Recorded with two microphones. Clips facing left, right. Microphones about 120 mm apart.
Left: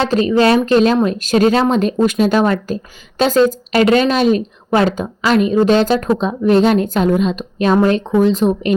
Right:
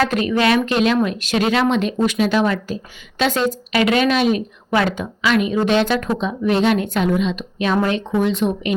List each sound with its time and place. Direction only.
0.0 s a woman's voice: 30° left (ahead or behind)